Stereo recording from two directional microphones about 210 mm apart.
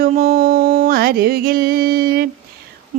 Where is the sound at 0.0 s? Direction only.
45° right (ahead or behind).